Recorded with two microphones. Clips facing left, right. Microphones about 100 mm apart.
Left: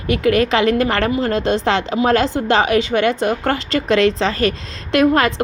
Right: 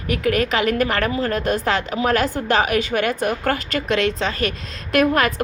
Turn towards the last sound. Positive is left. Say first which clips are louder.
# left 3 dB
turn(degrees=25)  # may be behind; listen again after turning